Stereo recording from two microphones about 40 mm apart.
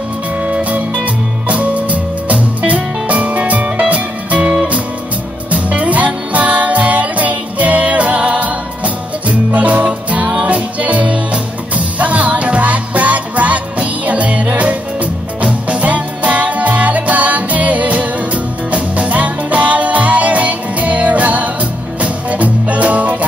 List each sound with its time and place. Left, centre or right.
0.4 s music: right